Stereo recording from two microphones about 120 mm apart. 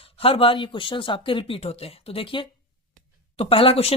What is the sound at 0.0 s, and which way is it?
Speech, 50° left (ahead or behind).